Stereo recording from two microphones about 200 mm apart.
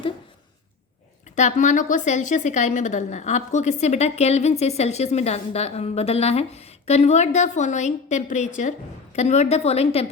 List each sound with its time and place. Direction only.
1.4 s a woman's voice: 35° left (ahead or behind)